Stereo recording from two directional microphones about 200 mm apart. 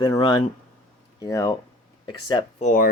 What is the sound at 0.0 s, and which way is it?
Speech, 20° left (ahead or behind).